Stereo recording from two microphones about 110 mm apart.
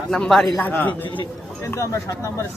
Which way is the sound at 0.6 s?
15° left (ahead or behind).